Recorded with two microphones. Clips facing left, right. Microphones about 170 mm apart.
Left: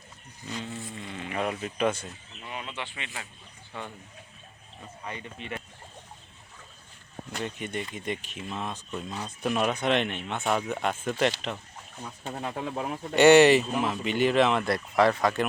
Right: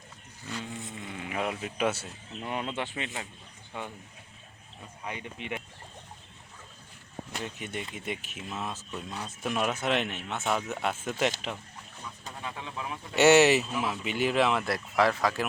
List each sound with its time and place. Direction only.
0.6 s sheep: 20° right (ahead or behind)
1.0 s speech: 5° right (ahead or behind)
2.4 s speech: 50° right (ahead or behind)
3.7 s speech: 10° right (ahead or behind)
5.0 s speech: 15° right (ahead or behind)
7.3 s speech: 5° right (ahead or behind)
12.4 s speech: 40° left (ahead or behind)
13.1 s speech: 5° right (ahead or behind)